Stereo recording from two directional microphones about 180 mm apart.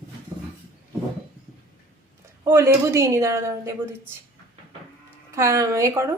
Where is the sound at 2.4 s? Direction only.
15° right (ahead or behind).